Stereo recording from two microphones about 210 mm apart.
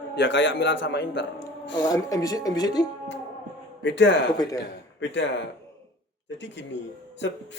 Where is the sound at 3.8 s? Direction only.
60° left (ahead or behind).